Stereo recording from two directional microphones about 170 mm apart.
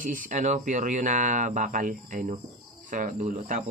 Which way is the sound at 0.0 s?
50° right (ahead or behind).